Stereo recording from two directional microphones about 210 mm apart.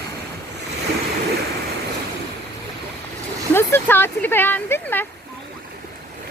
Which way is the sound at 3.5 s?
10° left (ahead or behind).